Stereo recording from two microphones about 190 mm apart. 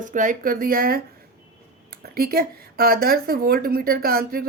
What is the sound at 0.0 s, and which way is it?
Speech, 40° right (ahead or behind).